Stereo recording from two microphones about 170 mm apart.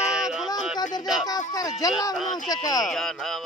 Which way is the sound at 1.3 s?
20° left (ahead or behind).